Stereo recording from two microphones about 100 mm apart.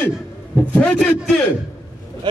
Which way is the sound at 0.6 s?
15° left (ahead or behind).